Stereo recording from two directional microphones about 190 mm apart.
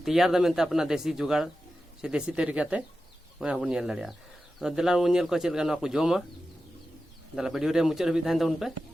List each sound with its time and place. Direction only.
0.0 s speech: centre (ahead or behind)
7.3 s speech: centre (ahead or behind)